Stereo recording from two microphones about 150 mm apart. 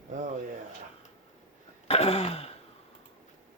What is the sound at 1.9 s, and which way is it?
Throat clearing, 45° left (ahead or behind).